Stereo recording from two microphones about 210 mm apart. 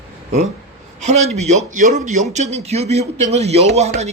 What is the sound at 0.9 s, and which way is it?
A man's voice, 30° right (ahead or behind).